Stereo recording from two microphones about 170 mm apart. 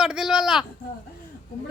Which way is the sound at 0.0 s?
5° right (ahead or behind).